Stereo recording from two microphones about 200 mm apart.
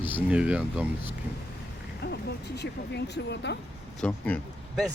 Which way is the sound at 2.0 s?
55° left (ahead or behind).